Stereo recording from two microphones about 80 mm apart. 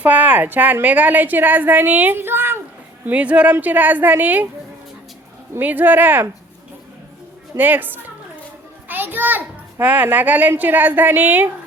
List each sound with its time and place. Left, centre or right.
0.0 s a child's voice: right
3.1 s a child's voice: centre
5.5 s a child's voice: right
7.5 s a child's voice: right